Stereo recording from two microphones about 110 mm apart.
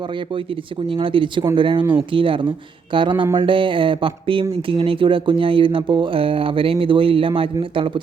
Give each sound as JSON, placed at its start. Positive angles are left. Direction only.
{"t": 0.9, "sound": "speech", "side_deg": -50}